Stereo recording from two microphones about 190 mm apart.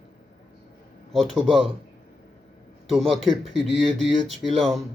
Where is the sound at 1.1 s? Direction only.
Centre (ahead or behind).